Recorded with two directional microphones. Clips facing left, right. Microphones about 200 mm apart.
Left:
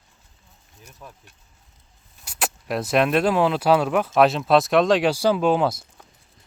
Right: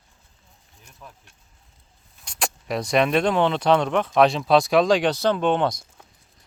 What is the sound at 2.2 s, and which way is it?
Speech, 5° left (ahead or behind).